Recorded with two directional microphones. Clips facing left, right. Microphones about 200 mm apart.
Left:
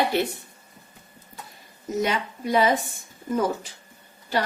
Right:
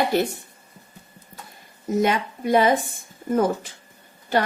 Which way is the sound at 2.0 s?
50° right (ahead or behind).